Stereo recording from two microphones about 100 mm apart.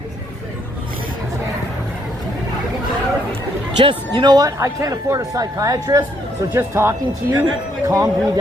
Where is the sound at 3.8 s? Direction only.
60° right (ahead or behind); by 7.4 s 25° right (ahead or behind).